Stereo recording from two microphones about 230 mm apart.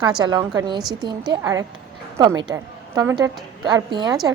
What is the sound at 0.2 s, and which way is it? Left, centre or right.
A woman's voice, centre.